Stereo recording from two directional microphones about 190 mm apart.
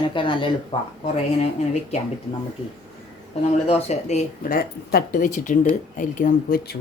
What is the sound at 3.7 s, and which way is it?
Speech, 35° left (ahead or behind).